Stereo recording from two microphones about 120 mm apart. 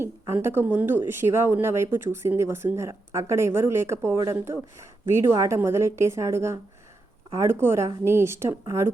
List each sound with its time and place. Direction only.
0.4 s speech: 15° right (ahead or behind)